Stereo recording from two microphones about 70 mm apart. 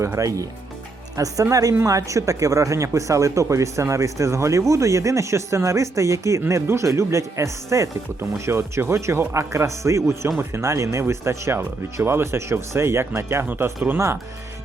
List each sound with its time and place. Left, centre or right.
0.2 s speech: right
13.4 s speech: right